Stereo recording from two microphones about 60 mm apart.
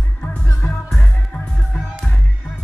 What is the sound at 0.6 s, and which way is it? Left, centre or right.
Music, left.